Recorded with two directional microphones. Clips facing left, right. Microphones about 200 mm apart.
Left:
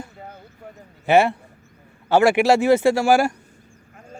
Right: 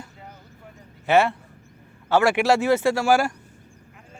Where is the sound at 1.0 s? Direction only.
15° left (ahead or behind).